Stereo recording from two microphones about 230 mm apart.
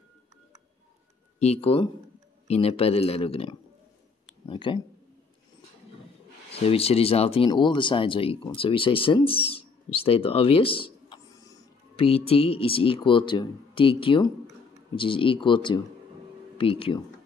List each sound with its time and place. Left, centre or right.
1.4 s speech: left
6.5 s speech: left